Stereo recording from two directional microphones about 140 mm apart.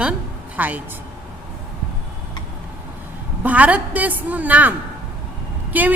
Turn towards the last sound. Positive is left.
turn(degrees=-10)  # may be behind; listen again after turning